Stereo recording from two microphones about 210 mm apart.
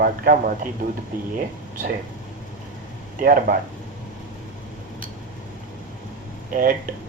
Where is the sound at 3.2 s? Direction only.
40° right (ahead or behind).